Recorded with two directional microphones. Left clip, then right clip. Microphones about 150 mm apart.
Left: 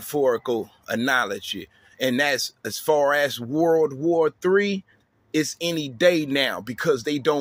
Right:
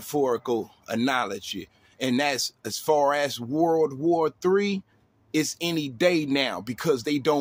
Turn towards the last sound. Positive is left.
turn(degrees=-20)  # may be behind; listen again after turning